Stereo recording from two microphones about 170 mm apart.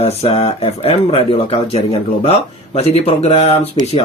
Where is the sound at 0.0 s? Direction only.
35° left (ahead or behind).